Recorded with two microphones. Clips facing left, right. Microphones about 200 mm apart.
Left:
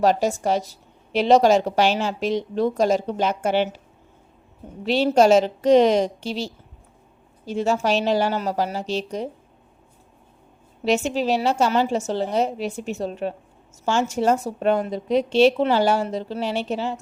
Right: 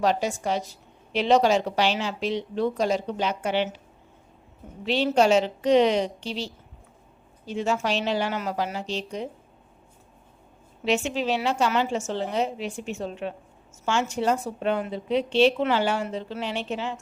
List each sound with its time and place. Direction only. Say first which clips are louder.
0.0 s a woman's voice: left 5 dB; 45° left (ahead or behind)
4.9 s a woman's voice: left 4 dB; 40° left (ahead or behind)
10.8 s speech: left 4 dB; 40° left (ahead or behind)